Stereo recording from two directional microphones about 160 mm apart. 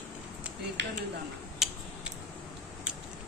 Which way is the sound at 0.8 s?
90° right.